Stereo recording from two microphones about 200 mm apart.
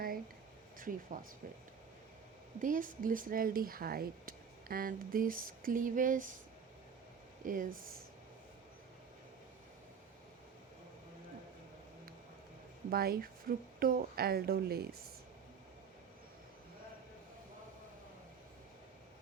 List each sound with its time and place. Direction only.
0.8 s speech: 40° right (ahead or behind)
2.6 s speech: 40° right (ahead or behind)
7.4 s speech: 45° right (ahead or behind)
12.9 s speech: 50° right (ahead or behind)